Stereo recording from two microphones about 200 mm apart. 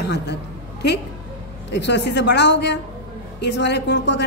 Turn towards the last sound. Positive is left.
turn(degrees=60)  # may be behind; listen again after turning